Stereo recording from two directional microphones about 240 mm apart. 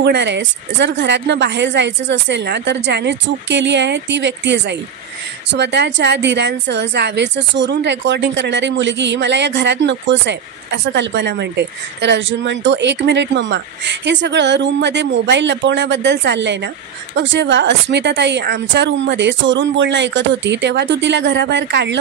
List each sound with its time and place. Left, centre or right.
0.0 s a woman's voice: right